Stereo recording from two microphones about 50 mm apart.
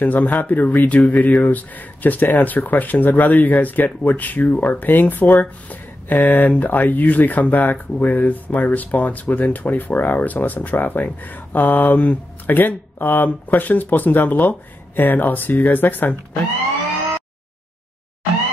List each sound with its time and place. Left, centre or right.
0.0 s speech: left